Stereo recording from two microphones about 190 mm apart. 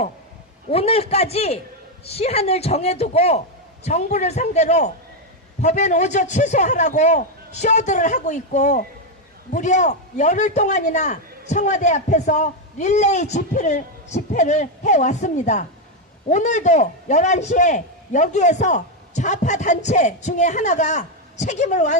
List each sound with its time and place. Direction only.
0.7 s a man's voice: 30° left (ahead or behind)